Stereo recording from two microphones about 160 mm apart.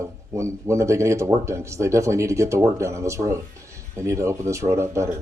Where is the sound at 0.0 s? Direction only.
20° right (ahead or behind).